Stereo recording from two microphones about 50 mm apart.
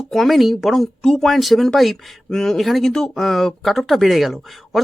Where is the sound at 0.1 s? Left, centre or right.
Centre.